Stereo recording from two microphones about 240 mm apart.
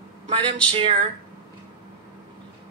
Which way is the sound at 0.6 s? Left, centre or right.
Centre.